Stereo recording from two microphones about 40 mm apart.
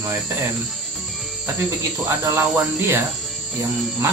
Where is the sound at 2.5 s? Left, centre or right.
Right.